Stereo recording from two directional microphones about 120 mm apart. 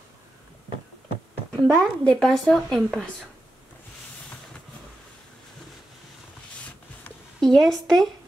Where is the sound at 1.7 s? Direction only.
5° left (ahead or behind).